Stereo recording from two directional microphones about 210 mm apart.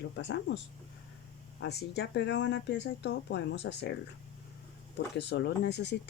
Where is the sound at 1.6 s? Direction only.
55° left (ahead or behind).